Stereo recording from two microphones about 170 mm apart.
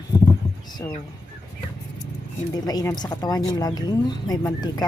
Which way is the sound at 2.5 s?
20° left (ahead or behind).